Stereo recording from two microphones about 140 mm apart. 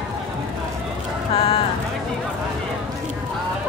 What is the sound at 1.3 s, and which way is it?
Music, 40° left (ahead or behind).